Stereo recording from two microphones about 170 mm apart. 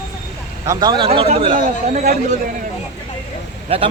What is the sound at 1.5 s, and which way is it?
Speech, 50° right (ahead or behind).